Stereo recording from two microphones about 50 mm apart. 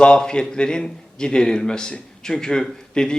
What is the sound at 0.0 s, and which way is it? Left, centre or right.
A man's voice, centre.